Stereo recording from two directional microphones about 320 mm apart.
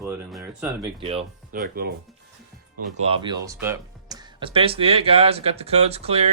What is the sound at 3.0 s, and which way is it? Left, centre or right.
Speech, centre.